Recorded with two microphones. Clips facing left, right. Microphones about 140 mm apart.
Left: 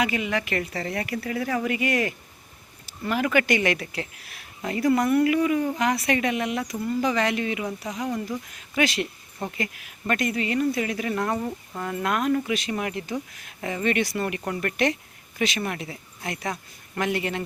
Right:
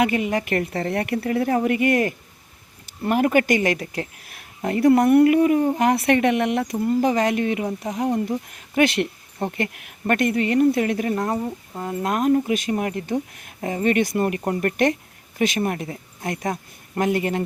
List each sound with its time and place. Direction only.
0.0 s speech: 50° right (ahead or behind)
11.1 s speech: 30° right (ahead or behind)
11.3 s speech: 10° right (ahead or behind)
11.8 s speech: 25° right (ahead or behind)
12.0 s speech: 35° right (ahead or behind)
13.1 s speech: 55° right (ahead or behind)
13.6 s speech: 40° right (ahead or behind)